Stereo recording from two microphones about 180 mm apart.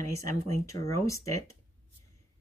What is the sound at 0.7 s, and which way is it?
Speech, 15° left (ahead or behind).